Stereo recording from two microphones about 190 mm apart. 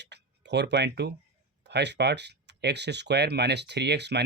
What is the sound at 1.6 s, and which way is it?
Speech, 65° right (ahead or behind).